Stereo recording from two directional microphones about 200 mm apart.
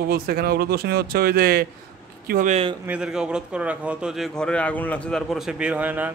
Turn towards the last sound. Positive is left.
turn(degrees=-10)  # may be behind; listen again after turning